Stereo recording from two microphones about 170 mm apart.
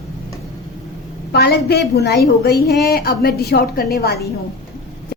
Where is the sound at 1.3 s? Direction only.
70° left (ahead or behind).